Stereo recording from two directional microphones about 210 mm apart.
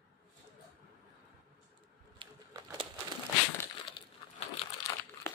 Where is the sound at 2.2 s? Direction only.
25° right (ahead or behind).